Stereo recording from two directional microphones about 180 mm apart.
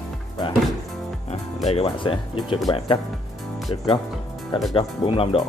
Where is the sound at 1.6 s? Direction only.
35° left (ahead or behind).